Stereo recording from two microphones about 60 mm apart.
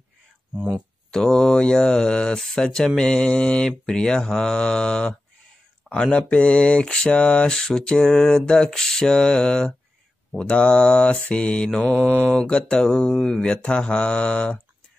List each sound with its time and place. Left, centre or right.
1.1 s speech: centre
11.9 s mantra: right
12.4 s speech: centre